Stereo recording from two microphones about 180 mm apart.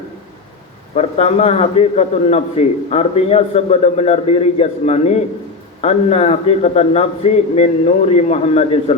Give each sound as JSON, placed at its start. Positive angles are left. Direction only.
{"t": 0.9, "sound": "a man's voice", "side_deg": 35}